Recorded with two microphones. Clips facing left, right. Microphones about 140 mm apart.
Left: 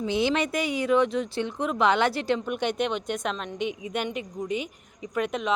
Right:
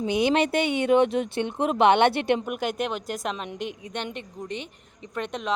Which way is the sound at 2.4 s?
5° right (ahead or behind).